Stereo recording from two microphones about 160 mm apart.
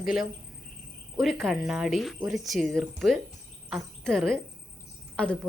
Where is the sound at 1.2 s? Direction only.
Centre (ahead or behind).